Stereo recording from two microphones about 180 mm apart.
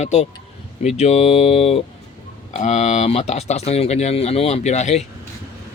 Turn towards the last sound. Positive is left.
turn(degrees=40)  # may be behind; listen again after turning